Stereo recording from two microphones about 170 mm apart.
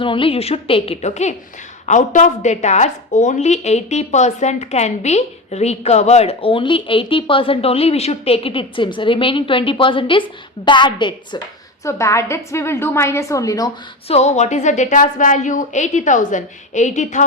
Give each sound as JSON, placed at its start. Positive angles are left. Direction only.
{"t": 0.0, "sound": "a woman's voice", "side_deg": 30}
{"t": 11.9, "sound": "a woman's voice", "side_deg": 15}
{"t": 14.1, "sound": "a woman's voice", "side_deg": 40}